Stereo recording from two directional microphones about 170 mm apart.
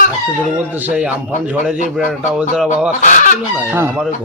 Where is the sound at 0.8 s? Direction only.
5° right (ahead or behind).